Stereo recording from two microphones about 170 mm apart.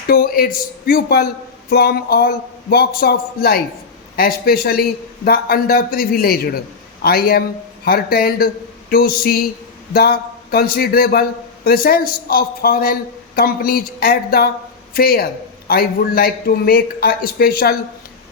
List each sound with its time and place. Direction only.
0.1 s a man's voice: 60° left (ahead or behind)